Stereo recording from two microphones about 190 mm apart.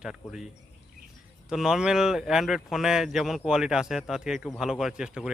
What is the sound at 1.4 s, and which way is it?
Speech, 5° right (ahead or behind).